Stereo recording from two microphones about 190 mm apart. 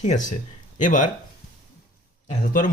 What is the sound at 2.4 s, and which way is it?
Speech, 50° left (ahead or behind).